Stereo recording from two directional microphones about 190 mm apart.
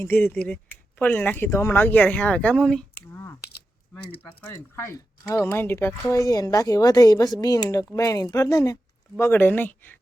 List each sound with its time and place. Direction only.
0.0 s speech: 10° left (ahead or behind)